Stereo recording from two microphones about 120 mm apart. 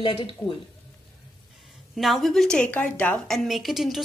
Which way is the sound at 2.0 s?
Centre (ahead or behind).